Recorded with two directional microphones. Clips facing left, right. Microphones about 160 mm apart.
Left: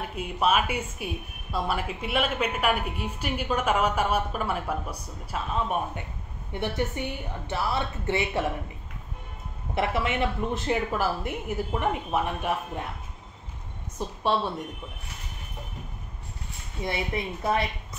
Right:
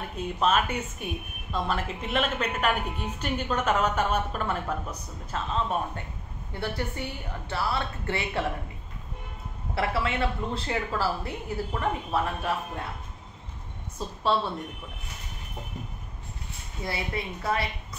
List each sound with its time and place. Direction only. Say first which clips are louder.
0.2 s a woman's voice: even; 10° left (ahead or behind)
9.8 s a woman's voice: left 1 dB; 20° left (ahead or behind)
16.8 s a woman's voice: left 2 dB; 20° left (ahead or behind)